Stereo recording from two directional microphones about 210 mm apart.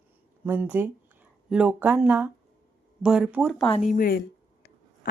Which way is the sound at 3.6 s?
30° left (ahead or behind).